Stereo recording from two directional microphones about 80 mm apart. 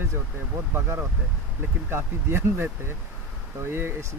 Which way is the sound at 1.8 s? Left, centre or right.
Right.